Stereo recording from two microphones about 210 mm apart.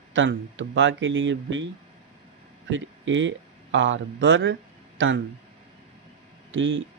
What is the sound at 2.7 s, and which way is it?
Speech, 60° right (ahead or behind).